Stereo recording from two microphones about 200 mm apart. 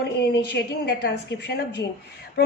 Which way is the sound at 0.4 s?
55° left (ahead or behind).